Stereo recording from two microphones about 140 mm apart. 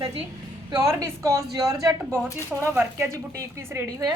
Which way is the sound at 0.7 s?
25° right (ahead or behind).